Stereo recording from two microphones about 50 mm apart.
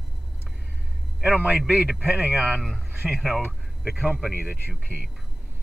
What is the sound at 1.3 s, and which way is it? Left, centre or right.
A man's voice, right.